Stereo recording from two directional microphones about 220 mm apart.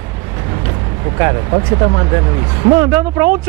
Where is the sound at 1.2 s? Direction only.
20° right (ahead or behind).